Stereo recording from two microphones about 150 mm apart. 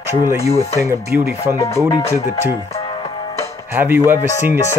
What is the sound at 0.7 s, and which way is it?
Speech, 20° right (ahead or behind).